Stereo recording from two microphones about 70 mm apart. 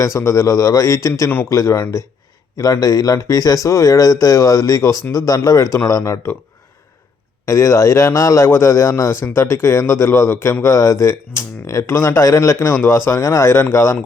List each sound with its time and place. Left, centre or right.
0.0 s a man's voice: left
5.9 s a man's voice: left
7.4 s a man's voice: left